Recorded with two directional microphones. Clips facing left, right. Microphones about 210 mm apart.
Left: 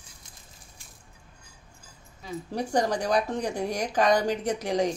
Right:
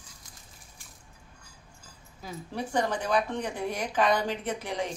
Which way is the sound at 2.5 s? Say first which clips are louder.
Left 3 dB; 40° left (ahead or behind).